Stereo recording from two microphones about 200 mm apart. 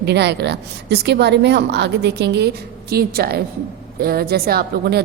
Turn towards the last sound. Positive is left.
turn(degrees=-50)  # may be behind; listen again after turning